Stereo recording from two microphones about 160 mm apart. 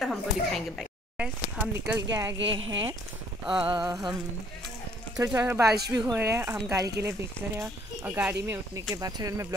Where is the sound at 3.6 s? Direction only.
30° right (ahead or behind).